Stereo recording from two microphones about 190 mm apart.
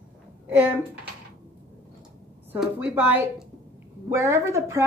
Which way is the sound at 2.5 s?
5° right (ahead or behind).